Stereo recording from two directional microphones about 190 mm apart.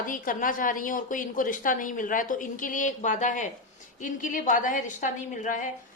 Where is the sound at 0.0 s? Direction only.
45° left (ahead or behind).